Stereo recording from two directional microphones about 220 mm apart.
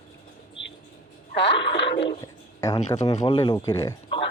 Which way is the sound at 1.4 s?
50° left (ahead or behind).